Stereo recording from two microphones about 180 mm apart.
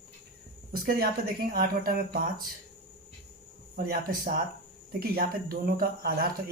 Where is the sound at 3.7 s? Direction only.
55° right (ahead or behind).